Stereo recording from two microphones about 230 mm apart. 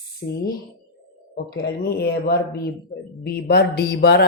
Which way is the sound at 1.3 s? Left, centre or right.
Left.